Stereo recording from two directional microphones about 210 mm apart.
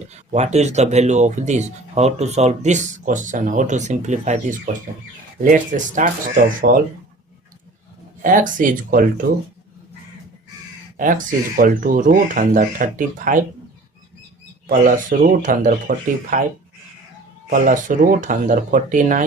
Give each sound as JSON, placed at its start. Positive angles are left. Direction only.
{"t": 0.1, "sound": "speech", "side_deg": -35}
{"t": 8.2, "sound": "speech", "side_deg": -40}
{"t": 10.9, "sound": "speech", "side_deg": -40}
{"t": 14.7, "sound": "speech", "side_deg": -40}
{"t": 17.5, "sound": "speech", "side_deg": -40}